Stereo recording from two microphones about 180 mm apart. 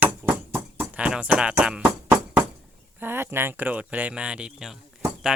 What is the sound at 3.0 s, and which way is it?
Speech, 10° right (ahead or behind).